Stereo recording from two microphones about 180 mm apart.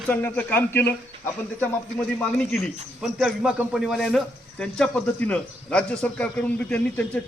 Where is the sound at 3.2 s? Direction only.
5° right (ahead or behind).